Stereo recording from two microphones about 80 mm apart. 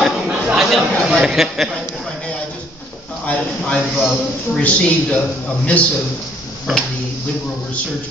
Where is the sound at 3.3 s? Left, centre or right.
Centre.